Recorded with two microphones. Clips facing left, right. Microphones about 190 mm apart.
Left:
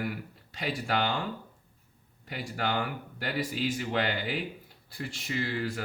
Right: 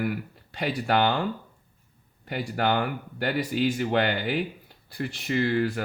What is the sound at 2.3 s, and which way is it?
Speech, 60° right (ahead or behind).